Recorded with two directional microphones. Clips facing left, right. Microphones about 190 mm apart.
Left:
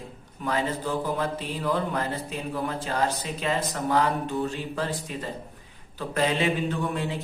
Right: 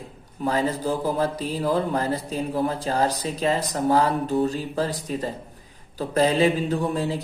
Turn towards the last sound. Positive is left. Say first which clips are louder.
# right 5 dB
turn(degrees=-35)  # may be behind; listen again after turning